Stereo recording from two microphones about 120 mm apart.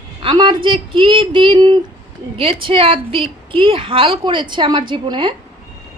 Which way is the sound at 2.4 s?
50° right (ahead or behind).